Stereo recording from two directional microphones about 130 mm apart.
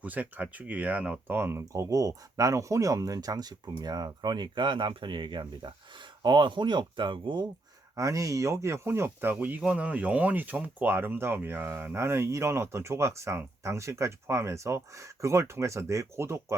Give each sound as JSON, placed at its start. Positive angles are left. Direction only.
{"t": 0.0, "sound": "speech", "side_deg": -10}
{"t": 7.9, "sound": "speech", "side_deg": -25}